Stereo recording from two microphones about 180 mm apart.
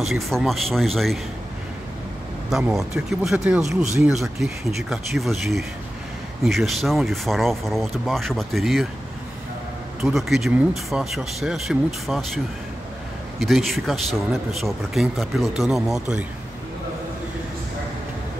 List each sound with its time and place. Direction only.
0.0 s speech: centre (ahead or behind)
2.5 s speech: centre (ahead or behind)
10.0 s speech: centre (ahead or behind)
13.4 s speech: centre (ahead or behind)